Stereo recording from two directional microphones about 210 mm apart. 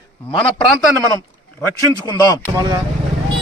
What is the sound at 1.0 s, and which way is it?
Speech, 20° right (ahead or behind).